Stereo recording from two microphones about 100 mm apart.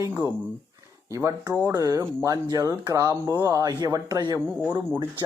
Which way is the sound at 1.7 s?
35° right (ahead or behind).